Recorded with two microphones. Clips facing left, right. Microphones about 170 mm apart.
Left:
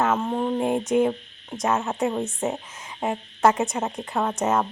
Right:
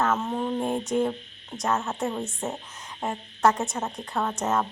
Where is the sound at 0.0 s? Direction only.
10° left (ahead or behind).